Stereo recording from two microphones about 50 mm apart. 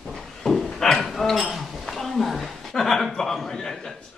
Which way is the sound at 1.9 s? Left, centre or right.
Centre.